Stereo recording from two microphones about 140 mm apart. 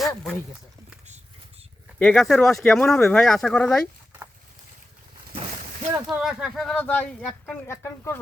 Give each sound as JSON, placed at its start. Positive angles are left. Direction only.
{"t": 2.0, "sound": "speech", "side_deg": 5}
{"t": 5.3, "sound": "a sound", "side_deg": -45}
{"t": 6.1, "sound": "speech", "side_deg": -5}